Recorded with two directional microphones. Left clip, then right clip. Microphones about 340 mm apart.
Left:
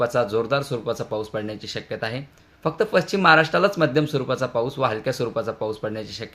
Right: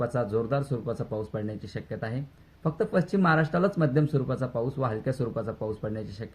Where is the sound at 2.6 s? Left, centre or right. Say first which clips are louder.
Left 7 dB; centre.